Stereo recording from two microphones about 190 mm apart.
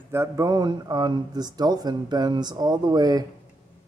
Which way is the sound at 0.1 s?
15° right (ahead or behind).